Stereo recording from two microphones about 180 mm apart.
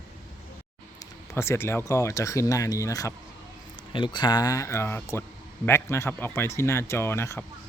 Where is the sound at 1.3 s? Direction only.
15° left (ahead or behind).